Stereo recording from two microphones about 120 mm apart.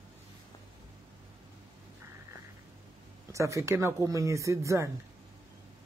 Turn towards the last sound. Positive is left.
turn(degrees=-25)  # may be behind; listen again after turning